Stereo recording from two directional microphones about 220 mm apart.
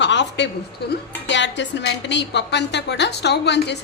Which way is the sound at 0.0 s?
55° left (ahead or behind).